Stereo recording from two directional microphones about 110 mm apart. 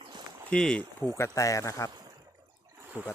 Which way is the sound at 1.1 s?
25° left (ahead or behind).